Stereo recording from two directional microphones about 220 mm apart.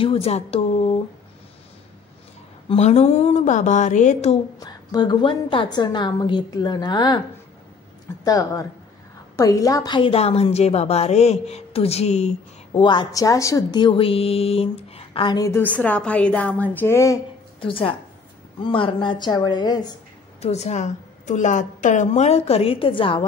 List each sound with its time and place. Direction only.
0.0 s speech: 25° left (ahead or behind)
2.7 s a woman's voice: 30° left (ahead or behind)
4.6 s a woman's voice: 20° left (ahead or behind)
8.2 s a woman's voice: 15° left (ahead or behind)
20.4 s a woman's voice: 30° left (ahead or behind)